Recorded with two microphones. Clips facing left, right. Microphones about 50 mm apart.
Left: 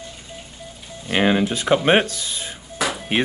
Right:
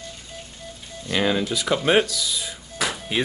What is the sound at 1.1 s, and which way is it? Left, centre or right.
Speech, left.